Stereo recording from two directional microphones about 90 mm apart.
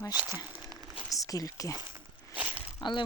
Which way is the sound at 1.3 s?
40° left (ahead or behind).